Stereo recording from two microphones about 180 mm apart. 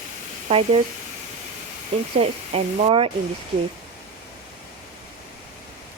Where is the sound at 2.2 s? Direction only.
35° right (ahead or behind).